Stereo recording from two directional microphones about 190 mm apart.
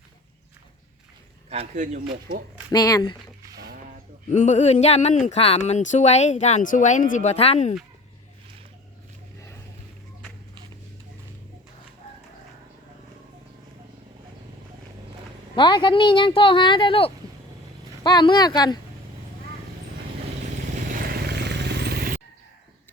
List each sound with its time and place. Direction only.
1.5 s a man's voice: 35° right (ahead or behind)
2.6 s a woman's voice: 20° left (ahead or behind)
4.3 s speech: 35° left (ahead or behind)
15.5 s a woman's voice: 25° left (ahead or behind)
21.1 s vehicle: 60° right (ahead or behind)